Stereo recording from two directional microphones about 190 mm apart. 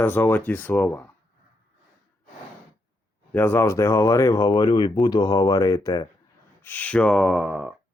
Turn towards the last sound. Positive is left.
turn(degrees=-5)  # may be behind; listen again after turning